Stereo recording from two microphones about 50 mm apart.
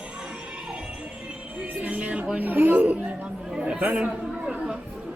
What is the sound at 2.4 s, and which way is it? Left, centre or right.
Speech, right.